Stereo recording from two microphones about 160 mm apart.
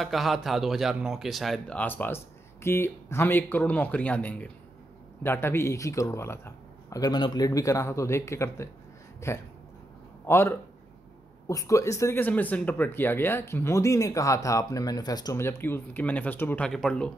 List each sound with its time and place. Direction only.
0.0 s speech: centre (ahead or behind)